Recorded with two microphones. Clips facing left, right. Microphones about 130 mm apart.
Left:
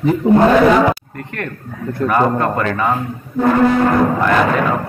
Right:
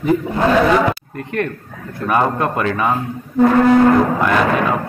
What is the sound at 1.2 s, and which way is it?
A man's voice, 20° right (ahead or behind).